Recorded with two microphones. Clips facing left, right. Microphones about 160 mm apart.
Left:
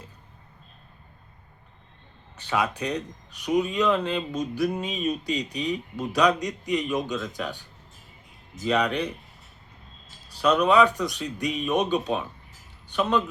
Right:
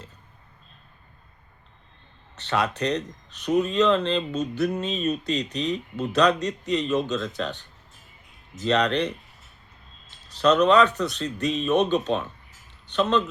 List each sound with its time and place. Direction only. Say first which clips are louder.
2.4 s speech: right 2 dB; 10° left (ahead or behind)
10.2 s speech: right 3 dB; 10° left (ahead or behind)